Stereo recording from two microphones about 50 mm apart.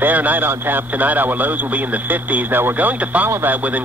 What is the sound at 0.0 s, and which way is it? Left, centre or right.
A man's voice, right.